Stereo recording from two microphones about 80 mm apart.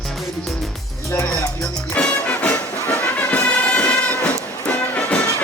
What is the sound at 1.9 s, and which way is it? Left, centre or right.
Music, centre.